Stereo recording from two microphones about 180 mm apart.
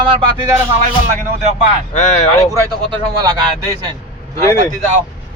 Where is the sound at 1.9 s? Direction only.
40° left (ahead or behind).